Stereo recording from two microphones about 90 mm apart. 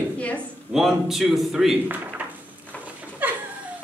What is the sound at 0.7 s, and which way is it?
A man's voice, 5° right (ahead or behind).